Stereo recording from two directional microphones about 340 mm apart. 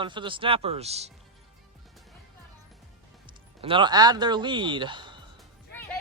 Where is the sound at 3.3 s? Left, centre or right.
Centre.